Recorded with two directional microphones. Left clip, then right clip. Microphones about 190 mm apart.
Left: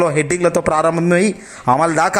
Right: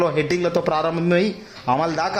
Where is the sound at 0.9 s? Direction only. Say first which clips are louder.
Left 5 dB; 10° left (ahead or behind).